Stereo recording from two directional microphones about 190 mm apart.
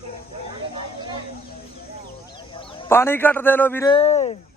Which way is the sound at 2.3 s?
25° left (ahead or behind).